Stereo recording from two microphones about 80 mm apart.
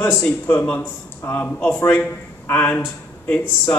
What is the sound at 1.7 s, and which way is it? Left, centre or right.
A man's voice, left.